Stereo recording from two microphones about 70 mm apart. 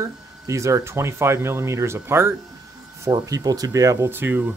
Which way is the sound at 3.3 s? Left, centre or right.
Right.